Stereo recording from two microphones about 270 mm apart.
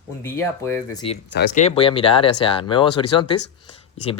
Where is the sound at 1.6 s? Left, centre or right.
Left.